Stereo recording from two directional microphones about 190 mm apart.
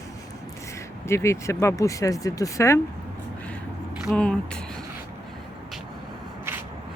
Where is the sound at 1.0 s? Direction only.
15° left (ahead or behind).